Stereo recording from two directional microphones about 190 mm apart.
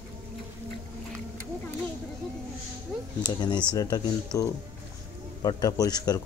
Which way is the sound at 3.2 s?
20° left (ahead or behind).